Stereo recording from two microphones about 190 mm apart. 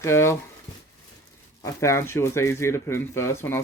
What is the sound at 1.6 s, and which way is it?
Speech, 15° left (ahead or behind).